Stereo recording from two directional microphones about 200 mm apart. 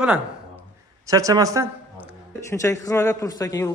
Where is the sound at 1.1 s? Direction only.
15° right (ahead or behind).